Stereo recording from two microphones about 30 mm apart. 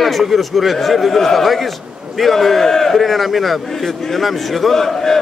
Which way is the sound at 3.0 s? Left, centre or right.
Centre.